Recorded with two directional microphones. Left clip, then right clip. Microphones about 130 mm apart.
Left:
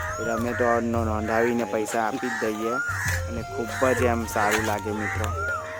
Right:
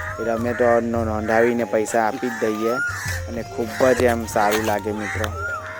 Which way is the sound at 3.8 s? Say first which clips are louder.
Right 6 dB; 20° right (ahead or behind).